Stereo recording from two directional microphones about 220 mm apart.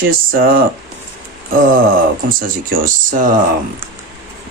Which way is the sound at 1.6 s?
40° right (ahead or behind).